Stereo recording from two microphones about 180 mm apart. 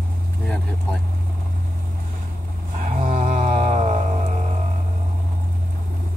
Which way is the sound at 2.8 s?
45° right (ahead or behind).